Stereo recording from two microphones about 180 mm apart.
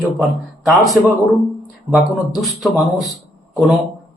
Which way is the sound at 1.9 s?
Centre (ahead or behind).